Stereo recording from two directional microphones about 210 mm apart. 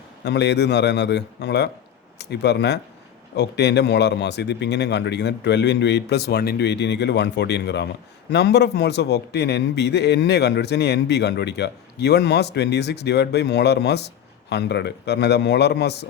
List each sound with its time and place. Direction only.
0.3 s a man's voice: 55° left (ahead or behind)